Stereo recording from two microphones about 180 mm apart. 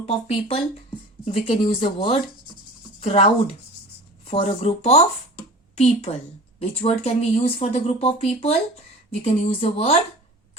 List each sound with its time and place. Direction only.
0.3 s a woman's voice: 35° left (ahead or behind)